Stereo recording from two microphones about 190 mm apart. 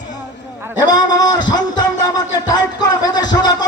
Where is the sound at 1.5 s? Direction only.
20° left (ahead or behind).